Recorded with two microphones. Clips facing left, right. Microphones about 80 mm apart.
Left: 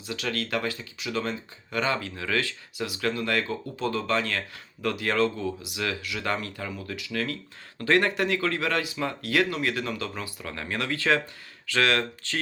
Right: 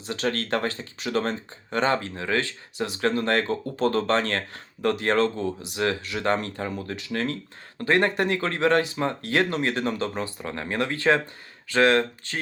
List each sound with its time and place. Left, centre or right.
0.1 s speech: right